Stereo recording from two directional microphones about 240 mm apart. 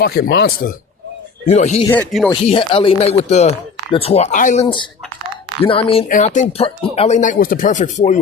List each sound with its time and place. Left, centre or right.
0.0 s speech: left
1.9 s speech: centre
2.3 s speech: left